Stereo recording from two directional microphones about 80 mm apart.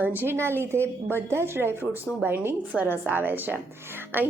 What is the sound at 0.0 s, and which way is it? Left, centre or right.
A woman's voice, right.